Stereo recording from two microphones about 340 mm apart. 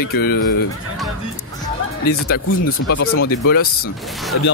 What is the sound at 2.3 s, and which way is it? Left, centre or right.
Speech, left.